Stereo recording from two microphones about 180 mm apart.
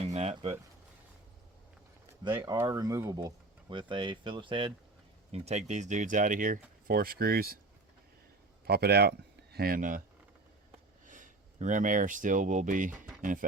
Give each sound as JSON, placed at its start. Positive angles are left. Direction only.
{"t": 0.1, "sound": "a sound", "side_deg": -35}
{"t": 2.3, "sound": "speech", "side_deg": -15}
{"t": 8.6, "sound": "speech", "side_deg": -65}
{"t": 11.0, "sound": "speech", "side_deg": -45}